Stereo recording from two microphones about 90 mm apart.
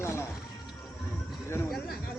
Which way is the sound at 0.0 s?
30° left (ahead or behind).